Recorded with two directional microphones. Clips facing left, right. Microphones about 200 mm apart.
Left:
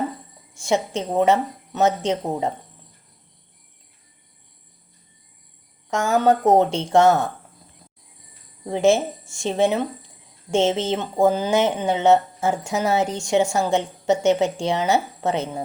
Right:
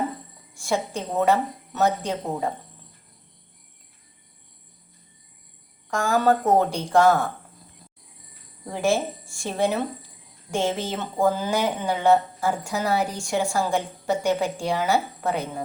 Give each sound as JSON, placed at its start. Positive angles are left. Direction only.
{"t": 0.6, "sound": "speech", "side_deg": 20}
{"t": 5.9, "sound": "speech", "side_deg": 20}
{"t": 8.7, "sound": "speech", "side_deg": 20}